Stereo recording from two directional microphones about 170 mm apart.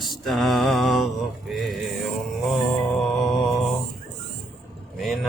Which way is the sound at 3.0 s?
Centre (ahead or behind).